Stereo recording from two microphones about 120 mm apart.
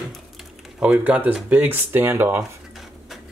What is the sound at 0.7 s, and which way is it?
Speech, 10° right (ahead or behind).